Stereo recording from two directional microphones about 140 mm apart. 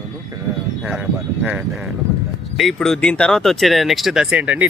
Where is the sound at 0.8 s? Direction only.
5° right (ahead or behind).